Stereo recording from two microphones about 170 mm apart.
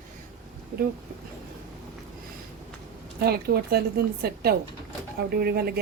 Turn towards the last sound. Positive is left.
turn(degrees=-65)  # may be behind; listen again after turning